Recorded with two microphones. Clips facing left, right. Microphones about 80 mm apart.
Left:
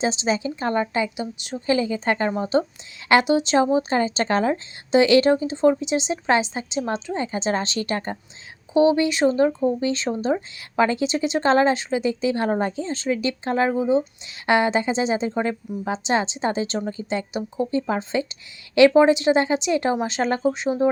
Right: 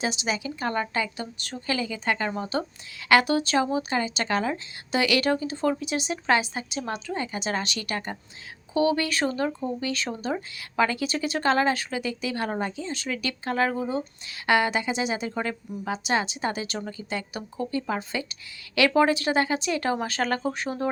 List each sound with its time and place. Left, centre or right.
0.0 s a woman's voice: left